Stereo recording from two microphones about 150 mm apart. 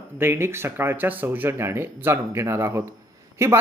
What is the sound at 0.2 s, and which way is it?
Speech, 15° right (ahead or behind).